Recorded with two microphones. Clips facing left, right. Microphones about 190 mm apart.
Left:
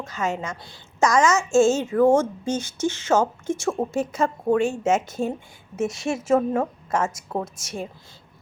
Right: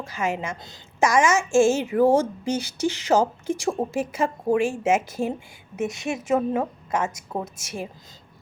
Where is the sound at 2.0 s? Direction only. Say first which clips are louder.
Left 1 dB; 35° right (ahead or behind).